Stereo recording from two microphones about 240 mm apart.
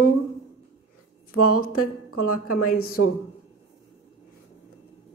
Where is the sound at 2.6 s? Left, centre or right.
Left.